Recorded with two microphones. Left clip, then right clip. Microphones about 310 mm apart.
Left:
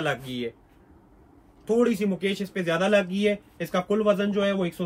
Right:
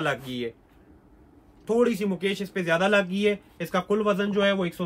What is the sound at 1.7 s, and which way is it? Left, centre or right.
A man's voice, centre.